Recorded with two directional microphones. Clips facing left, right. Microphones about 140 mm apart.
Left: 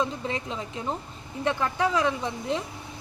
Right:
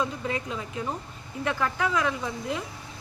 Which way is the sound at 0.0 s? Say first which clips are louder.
Left 1 dB; 25° left (ahead or behind).